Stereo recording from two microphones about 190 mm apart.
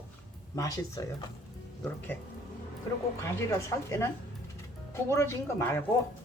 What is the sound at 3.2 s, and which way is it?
Speech, 15° left (ahead or behind).